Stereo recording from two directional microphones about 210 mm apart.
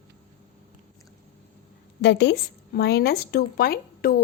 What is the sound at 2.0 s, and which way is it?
A woman's voice, 55° left (ahead or behind).